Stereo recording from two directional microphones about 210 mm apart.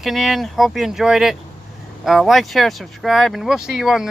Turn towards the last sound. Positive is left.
turn(degrees=0)  # may be behind; listen again after turning